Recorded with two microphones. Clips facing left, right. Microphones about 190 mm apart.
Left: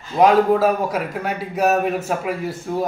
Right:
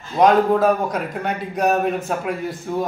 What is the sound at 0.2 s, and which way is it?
A man's voice, 5° left (ahead or behind).